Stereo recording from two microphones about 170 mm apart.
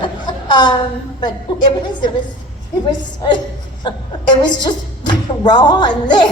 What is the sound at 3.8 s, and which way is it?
Speech, 25° left (ahead or behind).